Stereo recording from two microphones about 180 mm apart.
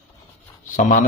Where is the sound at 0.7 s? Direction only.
45° left (ahead or behind).